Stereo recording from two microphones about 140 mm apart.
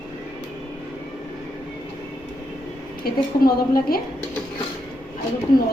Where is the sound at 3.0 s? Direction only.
90° left.